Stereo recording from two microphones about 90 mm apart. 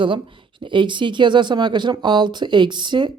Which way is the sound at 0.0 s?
70° right (ahead or behind).